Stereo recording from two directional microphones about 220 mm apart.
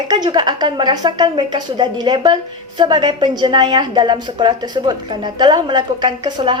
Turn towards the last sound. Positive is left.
turn(degrees=-20)  # may be behind; listen again after turning